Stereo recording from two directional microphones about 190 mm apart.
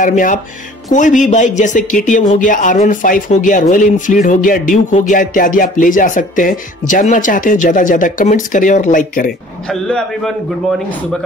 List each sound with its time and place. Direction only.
0.0 s speech: 40° left (ahead or behind)
9.7 s a man's voice: 5° left (ahead or behind)